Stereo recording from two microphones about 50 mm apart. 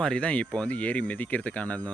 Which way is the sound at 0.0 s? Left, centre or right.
Left.